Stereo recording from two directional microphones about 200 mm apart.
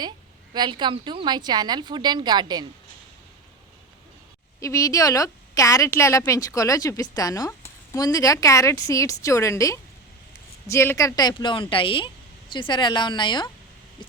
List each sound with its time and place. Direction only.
0.5 s a woman's voice: 20° right (ahead or behind)
4.6 s a woman's voice: 15° left (ahead or behind)